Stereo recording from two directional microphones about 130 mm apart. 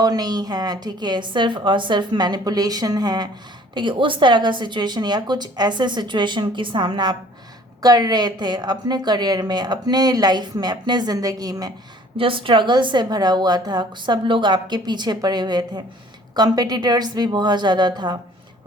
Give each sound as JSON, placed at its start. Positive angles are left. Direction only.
{"t": 0.0, "sound": "a woman's voice", "side_deg": -30}
{"t": 12.1, "sound": "a woman's voice", "side_deg": -45}